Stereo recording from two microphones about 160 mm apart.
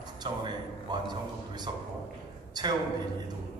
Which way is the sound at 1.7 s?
30° right (ahead or behind).